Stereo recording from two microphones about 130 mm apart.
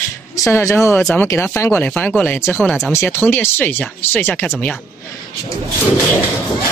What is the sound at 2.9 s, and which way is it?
Speech, 20° left (ahead or behind).